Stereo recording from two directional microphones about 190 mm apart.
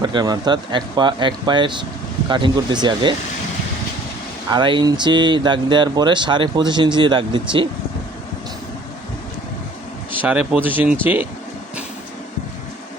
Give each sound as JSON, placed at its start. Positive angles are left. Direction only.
{"t": 0.0, "sound": "speech", "side_deg": -20}
{"t": 4.5, "sound": "speech", "side_deg": -25}
{"t": 10.2, "sound": "speech", "side_deg": -10}